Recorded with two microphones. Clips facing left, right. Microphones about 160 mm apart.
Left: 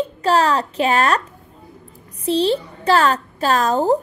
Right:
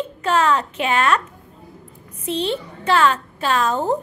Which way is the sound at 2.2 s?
35° left (ahead or behind).